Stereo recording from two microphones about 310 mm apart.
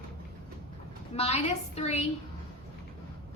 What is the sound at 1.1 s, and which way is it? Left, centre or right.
Speech, centre.